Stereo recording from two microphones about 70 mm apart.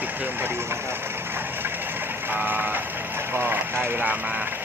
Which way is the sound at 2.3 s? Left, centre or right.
Right.